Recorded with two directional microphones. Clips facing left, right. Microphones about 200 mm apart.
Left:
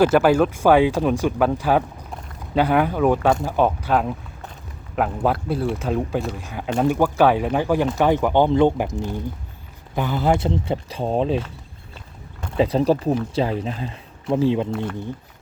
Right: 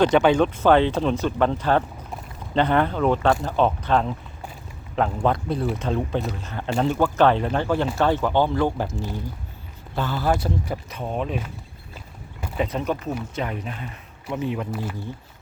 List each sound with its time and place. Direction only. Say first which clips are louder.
0.0 s speech: left 2 dB; 5° left (ahead or behind); by 11.4 s 30° left (ahead or behind)
12.5 s speech: left 7 dB; 30° left (ahead or behind)
14.7 s speech: left 4 dB; 5° right (ahead or behind)